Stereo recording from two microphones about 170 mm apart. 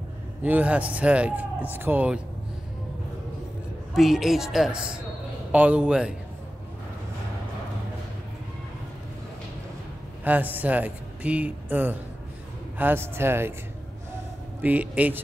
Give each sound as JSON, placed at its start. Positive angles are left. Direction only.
{"t": 0.4, "sound": "speech", "side_deg": -10}
{"t": 3.9, "sound": "a woman's voice", "side_deg": 0}
{"t": 10.2, "sound": "speech", "side_deg": -10}
{"t": 14.6, "sound": "speech", "side_deg": -10}